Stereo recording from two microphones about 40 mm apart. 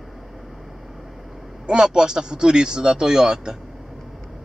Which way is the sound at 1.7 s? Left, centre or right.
Centre.